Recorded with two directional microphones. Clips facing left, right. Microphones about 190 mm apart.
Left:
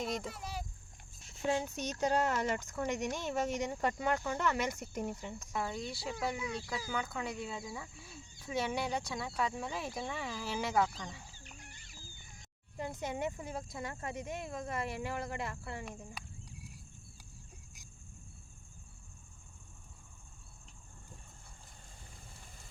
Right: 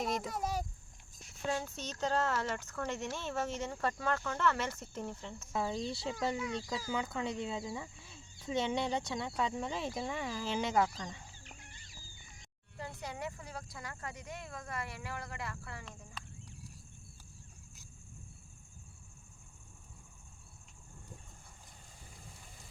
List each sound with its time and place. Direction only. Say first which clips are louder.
0.0 s a child's voice: right 2 dB; centre (ahead or behind)
0.3 s a child's voice: right 6 dB; 45° right (ahead or behind)
1.5 s speech: left 3 dB; 15° left (ahead or behind)
5.4 s speech: right 4 dB; 5° right (ahead or behind)
5.8 s speech: right 3 dB; 25° right (ahead or behind)
6.1 s speech: right 1 dB; 5° left (ahead or behind)
8.5 s speech: right 1 dB; 20° right (ahead or behind)
9.1 s speech: right 2 dB; 5° left (ahead or behind)
9.7 s speech: right 2 dB; 20° right (ahead or behind)
10.2 s speech: right 2 dB; centre (ahead or behind)
10.4 s speech: right 2 dB; 20° right (ahead or behind)
10.8 s speech: left 1 dB; 5° right (ahead or behind)
12.7 s speech: left 5 dB; 20° left (ahead or behind)
15.9 s fowl: left 4 dB; 15° left (ahead or behind)